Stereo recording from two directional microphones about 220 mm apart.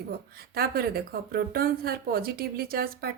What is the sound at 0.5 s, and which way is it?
Speech, 45° right (ahead or behind).